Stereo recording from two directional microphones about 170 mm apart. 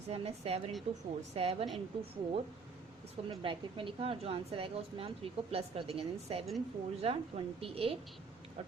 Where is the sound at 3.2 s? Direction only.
30° right (ahead or behind).